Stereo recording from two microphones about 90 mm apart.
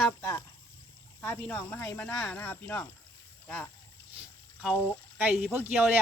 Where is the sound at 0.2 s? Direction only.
35° left (ahead or behind).